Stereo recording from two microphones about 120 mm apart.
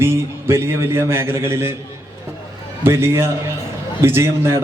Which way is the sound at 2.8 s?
20° right (ahead or behind).